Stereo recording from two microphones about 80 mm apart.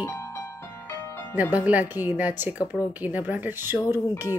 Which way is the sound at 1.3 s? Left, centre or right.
Centre.